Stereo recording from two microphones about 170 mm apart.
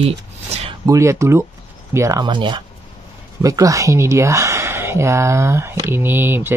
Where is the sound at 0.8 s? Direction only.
15° right (ahead or behind).